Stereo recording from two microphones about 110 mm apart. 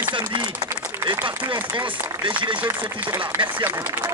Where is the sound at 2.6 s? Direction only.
15° right (ahead or behind).